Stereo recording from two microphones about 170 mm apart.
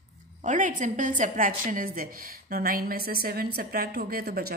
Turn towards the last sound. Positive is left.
turn(degrees=-60)  # may be behind; listen again after turning